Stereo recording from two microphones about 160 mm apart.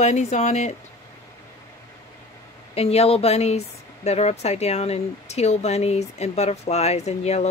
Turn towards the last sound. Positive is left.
turn(degrees=40)  # may be behind; listen again after turning